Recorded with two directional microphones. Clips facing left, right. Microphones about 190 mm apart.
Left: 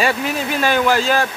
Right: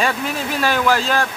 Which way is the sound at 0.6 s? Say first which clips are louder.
Left 1 dB; centre (ahead or behind).